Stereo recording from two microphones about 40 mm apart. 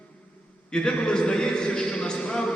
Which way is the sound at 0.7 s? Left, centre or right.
Left.